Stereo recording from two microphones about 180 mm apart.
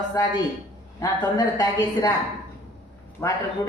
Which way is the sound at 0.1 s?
20° left (ahead or behind).